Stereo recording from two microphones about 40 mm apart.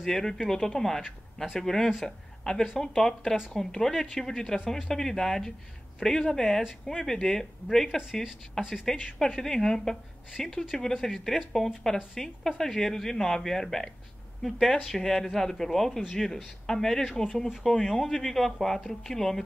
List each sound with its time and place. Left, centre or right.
0.0 s a woman's voice: centre